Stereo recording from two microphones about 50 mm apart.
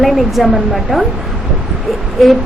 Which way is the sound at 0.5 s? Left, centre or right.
Centre.